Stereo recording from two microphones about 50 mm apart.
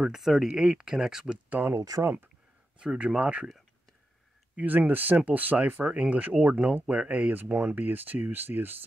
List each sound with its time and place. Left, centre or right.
0.0 s speech: centre
1.5 s speech: right
2.8 s speech: centre
4.6 s speech: right
5.9 s speech: right
7.7 s speech: right